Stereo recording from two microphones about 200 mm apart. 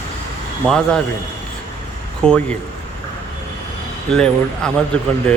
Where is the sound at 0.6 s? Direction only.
5° left (ahead or behind).